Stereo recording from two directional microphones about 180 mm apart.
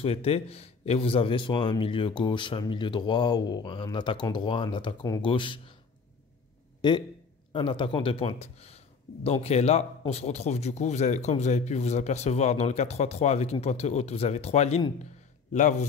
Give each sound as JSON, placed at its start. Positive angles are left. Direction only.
{"t": 0.0, "sound": "speech", "side_deg": 35}
{"t": 7.5, "sound": "speech", "side_deg": 30}